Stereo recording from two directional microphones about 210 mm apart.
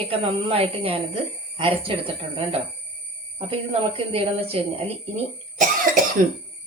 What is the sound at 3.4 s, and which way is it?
A woman's voice, 30° right (ahead or behind).